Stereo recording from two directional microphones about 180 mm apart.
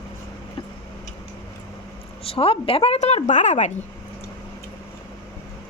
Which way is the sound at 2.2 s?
30° left (ahead or behind).